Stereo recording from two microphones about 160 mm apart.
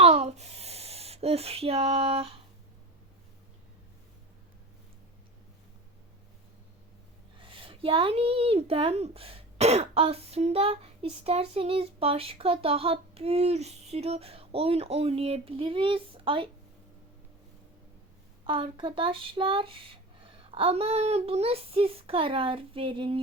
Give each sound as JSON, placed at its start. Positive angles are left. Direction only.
{"t": 0.0, "sound": "a sound", "side_deg": -40}
{"t": 7.3, "sound": "speech", "side_deg": -35}
{"t": 18.4, "sound": "speech", "side_deg": -30}